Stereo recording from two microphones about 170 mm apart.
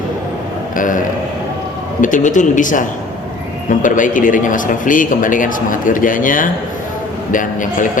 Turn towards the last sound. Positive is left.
turn(degrees=50)  # may be behind; listen again after turning